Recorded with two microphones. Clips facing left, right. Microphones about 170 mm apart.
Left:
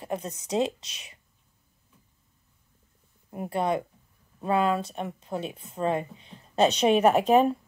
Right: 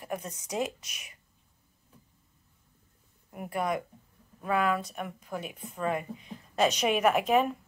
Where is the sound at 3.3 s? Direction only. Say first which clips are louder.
Left 4 dB; 25° left (ahead or behind).